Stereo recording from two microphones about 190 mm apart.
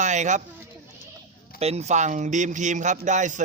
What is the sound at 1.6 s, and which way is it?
Speech, 35° right (ahead or behind).